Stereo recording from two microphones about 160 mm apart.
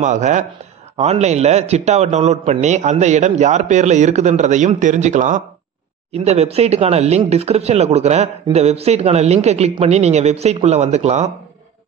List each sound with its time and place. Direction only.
0.0 s a man's voice: 50° right (ahead or behind)